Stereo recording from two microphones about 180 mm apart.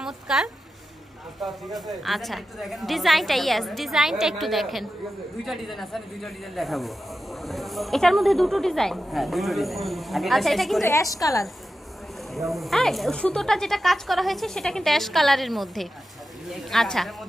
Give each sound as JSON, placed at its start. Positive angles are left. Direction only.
{"t": 0.0, "sound": "a sound", "side_deg": 0}
{"t": 1.4, "sound": "speech", "side_deg": 0}
{"t": 10.8, "sound": "a woman's voice", "side_deg": 15}
{"t": 12.2, "sound": "speech", "side_deg": 0}